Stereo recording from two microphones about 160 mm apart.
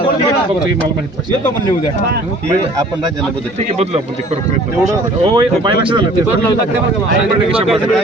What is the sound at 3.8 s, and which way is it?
Speech, 45° right (ahead or behind).